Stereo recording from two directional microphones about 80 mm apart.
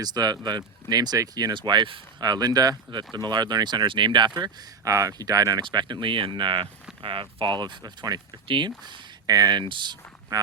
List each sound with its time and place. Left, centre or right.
0.0 s speech: right
1.5 s speech: right
4.9 s speech: right
5.7 s speech: right
9.2 s speech: right
9.6 s speech: right
10.3 s speech: right